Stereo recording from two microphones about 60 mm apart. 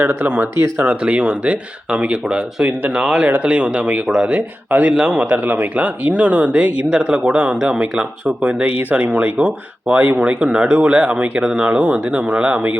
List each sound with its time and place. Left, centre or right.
0.1 s speech: right
0.5 s speech: right
0.9 s speech: right